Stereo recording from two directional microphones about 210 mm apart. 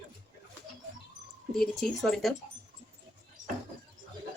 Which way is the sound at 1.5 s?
Centre (ahead or behind).